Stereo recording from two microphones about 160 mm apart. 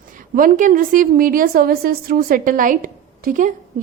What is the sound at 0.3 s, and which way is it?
A woman's voice, 55° right (ahead or behind).